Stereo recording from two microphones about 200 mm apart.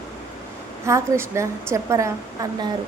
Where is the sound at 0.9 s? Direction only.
15° right (ahead or behind).